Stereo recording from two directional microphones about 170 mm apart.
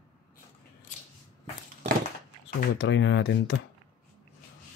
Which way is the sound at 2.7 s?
90° left.